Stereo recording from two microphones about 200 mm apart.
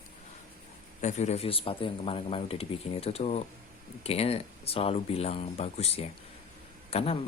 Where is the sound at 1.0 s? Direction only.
35° left (ahead or behind).